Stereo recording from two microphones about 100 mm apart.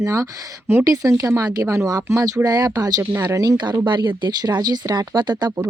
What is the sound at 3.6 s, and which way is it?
Speech, 50° right (ahead or behind).